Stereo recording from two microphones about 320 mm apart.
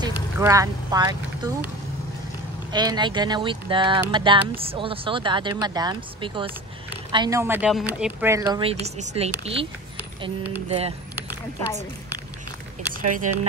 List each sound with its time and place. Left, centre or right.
0.4 s speech: centre
2.7 s speech: centre
13.0 s speech: right